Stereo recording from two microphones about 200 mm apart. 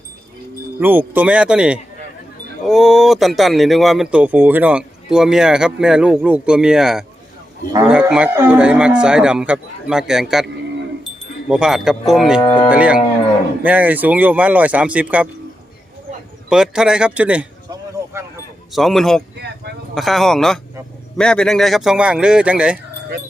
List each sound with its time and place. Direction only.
0.8 s speech: 10° right (ahead or behind)
12.4 s cattle: 25° left (ahead or behind)
12.7 s speech: 5° right (ahead or behind)
16.5 s speech: 5° right (ahead or behind)
17.7 s a sound: 15° right (ahead or behind)
18.7 s speech: centre (ahead or behind)
19.4 s a sound: 55° right (ahead or behind)
19.9 s speech: centre (ahead or behind)